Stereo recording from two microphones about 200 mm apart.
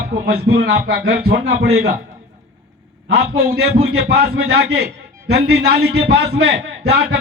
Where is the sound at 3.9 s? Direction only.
55° right (ahead or behind).